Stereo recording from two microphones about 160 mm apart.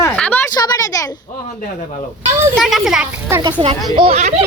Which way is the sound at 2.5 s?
Centre (ahead or behind).